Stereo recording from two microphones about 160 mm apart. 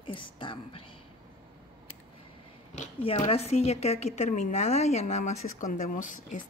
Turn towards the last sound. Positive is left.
turn(degrees=55)  # may be behind; listen again after turning